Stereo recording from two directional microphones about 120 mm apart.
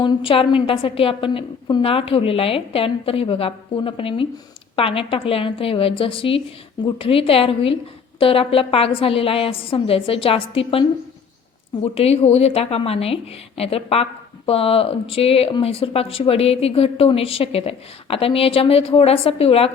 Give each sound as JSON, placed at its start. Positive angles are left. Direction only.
{"t": 0.0, "sound": "a woman's voice", "side_deg": 45}